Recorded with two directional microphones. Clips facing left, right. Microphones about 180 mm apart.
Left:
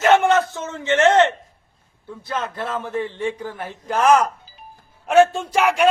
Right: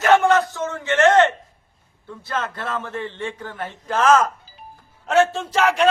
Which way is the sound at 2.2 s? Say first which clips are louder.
Left 1 dB; 15° left (ahead or behind).